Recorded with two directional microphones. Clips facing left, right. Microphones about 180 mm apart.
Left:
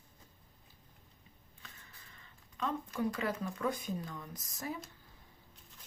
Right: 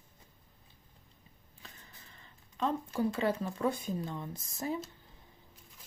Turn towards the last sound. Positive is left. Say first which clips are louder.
# right 5 dB
turn(degrees=-25)  # may be behind; listen again after turning